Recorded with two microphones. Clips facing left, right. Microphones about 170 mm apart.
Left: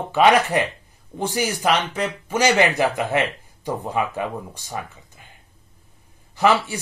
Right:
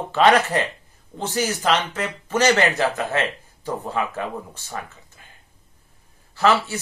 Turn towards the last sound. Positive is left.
turn(degrees=15)  # may be behind; listen again after turning